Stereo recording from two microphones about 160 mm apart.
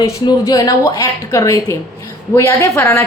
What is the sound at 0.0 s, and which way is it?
A woman's voice, 20° left (ahead or behind).